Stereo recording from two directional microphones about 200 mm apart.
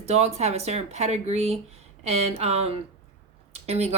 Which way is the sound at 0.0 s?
30° right (ahead or behind).